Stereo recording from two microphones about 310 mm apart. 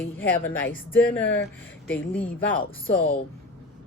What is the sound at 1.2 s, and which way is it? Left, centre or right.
Speech, left.